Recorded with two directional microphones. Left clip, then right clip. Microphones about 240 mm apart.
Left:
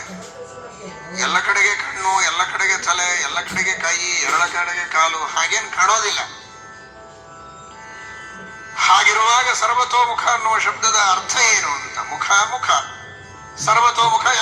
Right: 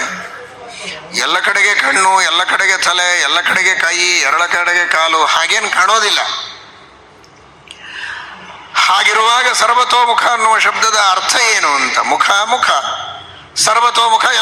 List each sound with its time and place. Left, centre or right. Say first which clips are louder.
1.1 s a man's voice: right 4 dB; right
8.7 s a man's voice: right 3 dB; right